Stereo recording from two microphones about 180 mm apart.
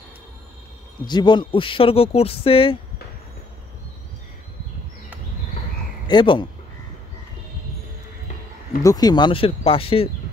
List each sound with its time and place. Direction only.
1.0 s speech: 25° left (ahead or behind)
6.0 s speech: 25° left (ahead or behind)
8.8 s speech: 20° left (ahead or behind)